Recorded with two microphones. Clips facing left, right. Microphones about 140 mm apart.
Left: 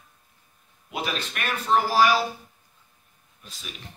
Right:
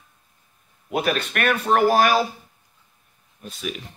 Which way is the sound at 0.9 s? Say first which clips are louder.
Right 8 dB; 55° right (ahead or behind).